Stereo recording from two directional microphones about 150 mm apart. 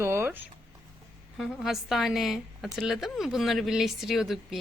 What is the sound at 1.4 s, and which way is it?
A woman's voice, centre (ahead or behind).